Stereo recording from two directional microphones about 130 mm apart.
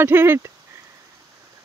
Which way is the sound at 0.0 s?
15° right (ahead or behind).